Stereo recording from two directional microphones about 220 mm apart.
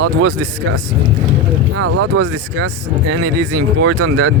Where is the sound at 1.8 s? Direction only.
70° right (ahead or behind).